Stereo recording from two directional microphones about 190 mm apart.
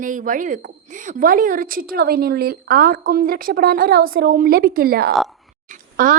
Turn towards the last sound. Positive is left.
turn(degrees=-45)  # may be behind; listen again after turning